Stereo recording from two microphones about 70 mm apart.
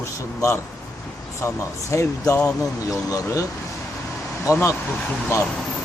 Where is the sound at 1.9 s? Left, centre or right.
Left.